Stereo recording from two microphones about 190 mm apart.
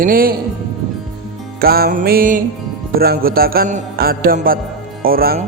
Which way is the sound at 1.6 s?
50° right (ahead or behind).